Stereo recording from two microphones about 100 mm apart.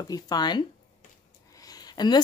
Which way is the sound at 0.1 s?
40° left (ahead or behind).